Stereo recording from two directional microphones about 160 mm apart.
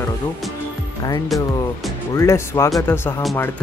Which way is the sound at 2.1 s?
15° left (ahead or behind).